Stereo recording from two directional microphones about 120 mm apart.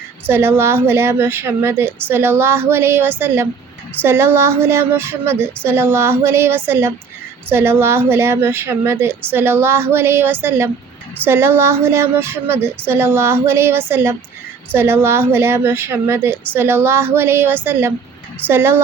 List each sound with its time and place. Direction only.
0.3 s a woman's voice: 20° right (ahead or behind)